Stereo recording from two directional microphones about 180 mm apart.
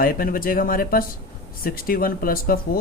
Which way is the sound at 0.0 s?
55° left (ahead or behind).